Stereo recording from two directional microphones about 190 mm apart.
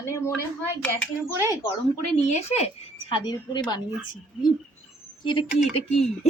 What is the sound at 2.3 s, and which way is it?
A woman's voice, 30° left (ahead or behind).